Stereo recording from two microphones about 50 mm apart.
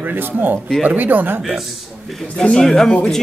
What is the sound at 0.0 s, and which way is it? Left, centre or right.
Speech, right.